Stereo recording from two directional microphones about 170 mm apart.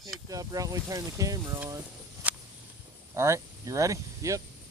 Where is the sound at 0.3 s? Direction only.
20° right (ahead or behind).